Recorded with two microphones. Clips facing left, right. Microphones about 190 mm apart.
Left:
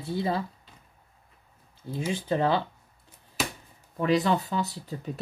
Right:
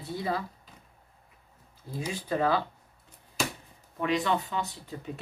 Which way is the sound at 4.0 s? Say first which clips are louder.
Left 4 dB; 35° left (ahead or behind).